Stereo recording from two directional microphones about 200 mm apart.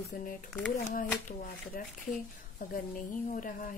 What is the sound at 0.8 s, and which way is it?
A woman's voice, 40° left (ahead or behind).